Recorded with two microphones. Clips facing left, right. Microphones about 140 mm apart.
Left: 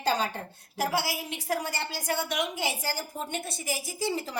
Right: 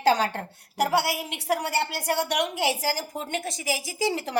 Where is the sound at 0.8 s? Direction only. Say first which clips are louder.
Right 5 dB; 75° right (ahead or behind).